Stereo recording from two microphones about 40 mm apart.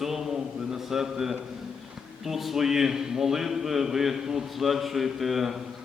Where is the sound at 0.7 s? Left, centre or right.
Centre.